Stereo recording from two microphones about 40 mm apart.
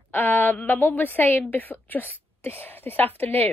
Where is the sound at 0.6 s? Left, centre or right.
Left.